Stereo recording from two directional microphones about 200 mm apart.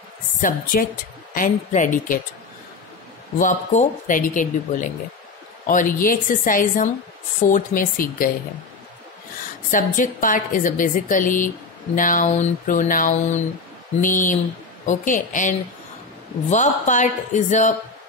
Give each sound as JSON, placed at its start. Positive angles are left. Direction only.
{"t": 0.4, "sound": "a woman's voice", "side_deg": 45}
{"t": 3.3, "sound": "a woman's voice", "side_deg": 40}
{"t": 9.7, "sound": "a woman's voice", "side_deg": 40}